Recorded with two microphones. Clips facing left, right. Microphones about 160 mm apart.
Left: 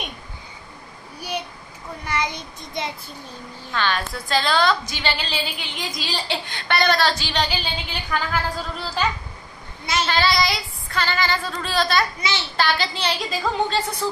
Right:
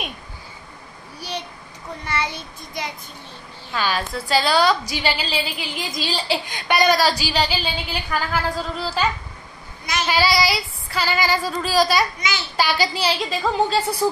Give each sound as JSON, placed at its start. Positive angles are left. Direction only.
{"t": 2.0, "sound": "child singing", "side_deg": 15}
{"t": 3.7, "sound": "a woman's voice", "side_deg": -5}
{"t": 10.0, "sound": "a woman's voice", "side_deg": -10}
{"t": 12.2, "sound": "a child's voice", "side_deg": 30}
{"t": 12.5, "sound": "a woman's voice", "side_deg": -10}